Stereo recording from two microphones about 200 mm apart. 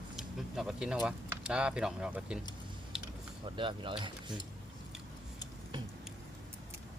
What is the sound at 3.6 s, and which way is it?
Speech, 25° right (ahead or behind).